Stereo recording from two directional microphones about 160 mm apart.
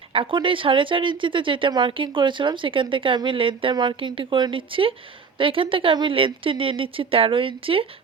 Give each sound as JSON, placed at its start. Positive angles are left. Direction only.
{"t": 0.1, "sound": "speech", "side_deg": -35}